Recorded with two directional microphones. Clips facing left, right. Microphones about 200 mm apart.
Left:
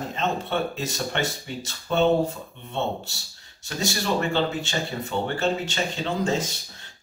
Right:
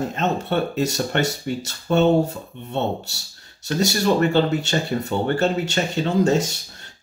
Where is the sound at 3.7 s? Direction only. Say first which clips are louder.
Right 7 dB; 65° right (ahead or behind).